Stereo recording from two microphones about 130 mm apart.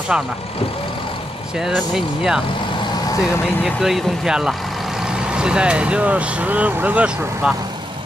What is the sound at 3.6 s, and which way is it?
Speech, centre (ahead or behind).